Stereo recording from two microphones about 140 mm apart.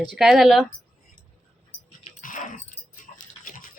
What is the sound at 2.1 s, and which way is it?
Dog, 60° left (ahead or behind).